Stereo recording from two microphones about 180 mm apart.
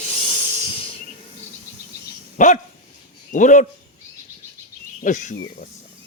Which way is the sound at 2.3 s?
45° left (ahead or behind).